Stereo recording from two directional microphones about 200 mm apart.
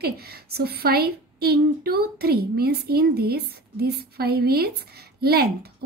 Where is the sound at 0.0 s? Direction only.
50° right (ahead or behind).